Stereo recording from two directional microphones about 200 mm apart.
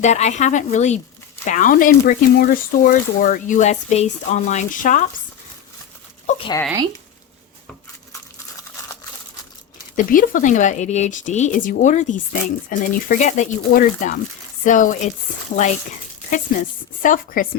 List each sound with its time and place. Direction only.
0.0 s speech: 35° left (ahead or behind)
9.9 s speech: 40° left (ahead or behind)